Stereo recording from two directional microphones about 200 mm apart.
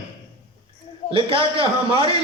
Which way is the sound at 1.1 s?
25° right (ahead or behind).